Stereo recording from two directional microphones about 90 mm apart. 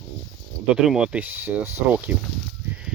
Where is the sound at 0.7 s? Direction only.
5° right (ahead or behind).